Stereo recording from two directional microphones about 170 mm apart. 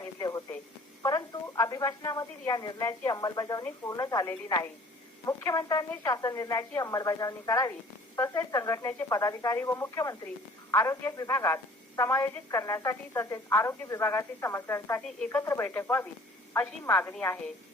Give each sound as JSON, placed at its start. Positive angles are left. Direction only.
{"t": 0.0, "sound": "radio", "side_deg": 20}
{"t": 1.0, "sound": "a woman's voice", "side_deg": 20}